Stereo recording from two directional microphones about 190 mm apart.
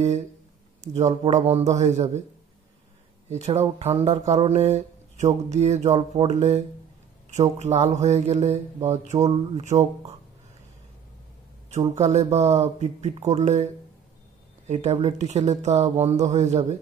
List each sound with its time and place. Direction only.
0.7 s speech: 35° right (ahead or behind)
3.3 s speech: 35° right (ahead or behind)
11.9 s speech: 35° right (ahead or behind)
14.7 s speech: 35° right (ahead or behind)